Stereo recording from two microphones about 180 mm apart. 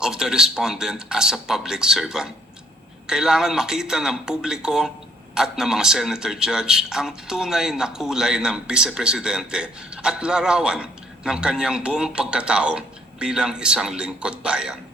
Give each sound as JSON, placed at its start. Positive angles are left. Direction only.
{"t": 0.0, "sound": "a man's voice", "side_deg": -5}